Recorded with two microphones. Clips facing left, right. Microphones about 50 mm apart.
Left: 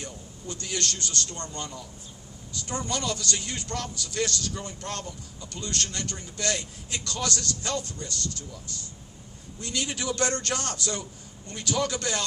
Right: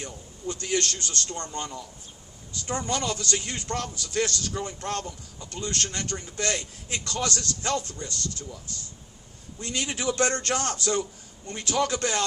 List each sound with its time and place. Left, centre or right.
0.0 s a man's voice: right
9.6 s a man's voice: right